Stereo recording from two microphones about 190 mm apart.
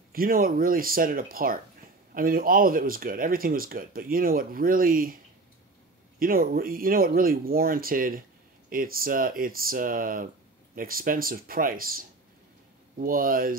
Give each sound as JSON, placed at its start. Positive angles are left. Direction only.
{"t": 0.1, "sound": "speech", "side_deg": -50}